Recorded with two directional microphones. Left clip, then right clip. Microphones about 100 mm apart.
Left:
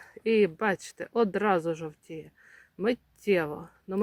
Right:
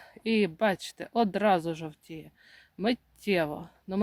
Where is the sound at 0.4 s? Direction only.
15° right (ahead or behind).